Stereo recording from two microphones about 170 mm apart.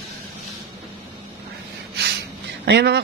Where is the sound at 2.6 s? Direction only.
80° right.